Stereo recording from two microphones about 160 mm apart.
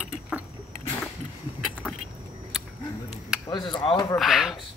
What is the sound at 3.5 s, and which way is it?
Speech, 30° left (ahead or behind).